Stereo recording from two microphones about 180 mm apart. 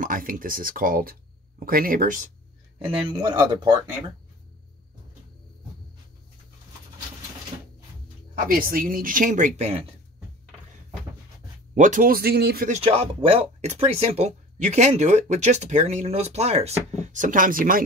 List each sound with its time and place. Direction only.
0.0 s speech: 50° right (ahead or behind)
2.9 s speech: 25° right (ahead or behind)
8.4 s speech: 50° right (ahead or behind); by 9.8 s 35° right (ahead or behind)
11.7 s speech: 45° right (ahead or behind); by 12.6 s 60° right (ahead or behind)
12.6 s speech: 35° right (ahead or behind); by 17.8 s 50° right (ahead or behind)